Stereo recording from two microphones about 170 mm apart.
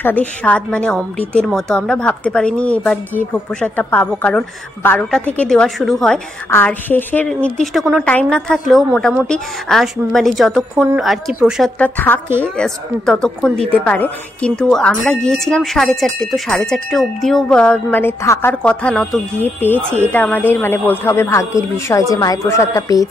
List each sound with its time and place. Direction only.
0.0 s a woman's voice: 10° left (ahead or behind)
11.8 s a woman's voice: 10° left (ahead or behind)